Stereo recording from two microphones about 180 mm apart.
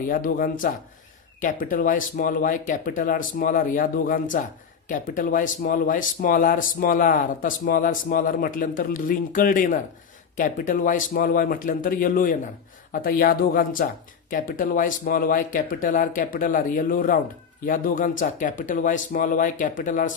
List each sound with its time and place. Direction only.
0.1 s speech: 50° left (ahead or behind)